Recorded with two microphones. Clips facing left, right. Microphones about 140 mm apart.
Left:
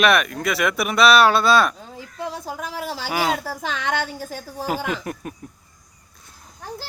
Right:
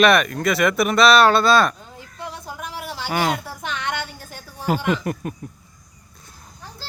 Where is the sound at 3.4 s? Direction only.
40° left (ahead or behind).